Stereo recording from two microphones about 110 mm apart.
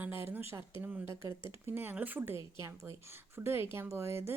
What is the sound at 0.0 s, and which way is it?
Speech, 20° right (ahead or behind).